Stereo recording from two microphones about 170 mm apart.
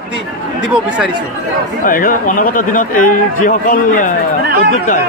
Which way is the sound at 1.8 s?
55° left (ahead or behind).